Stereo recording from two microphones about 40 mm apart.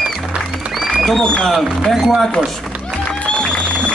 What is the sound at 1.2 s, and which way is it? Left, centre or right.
Speech, left.